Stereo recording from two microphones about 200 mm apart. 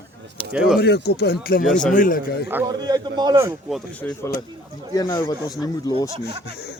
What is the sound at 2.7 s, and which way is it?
Speech, 20° right (ahead or behind).